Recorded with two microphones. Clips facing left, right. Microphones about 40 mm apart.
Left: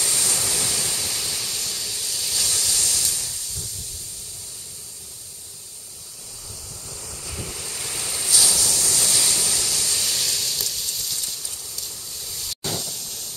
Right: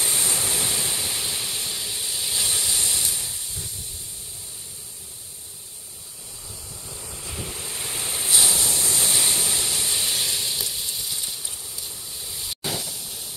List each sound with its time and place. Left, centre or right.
0.0 s waves: centre
6.7 s waves: centre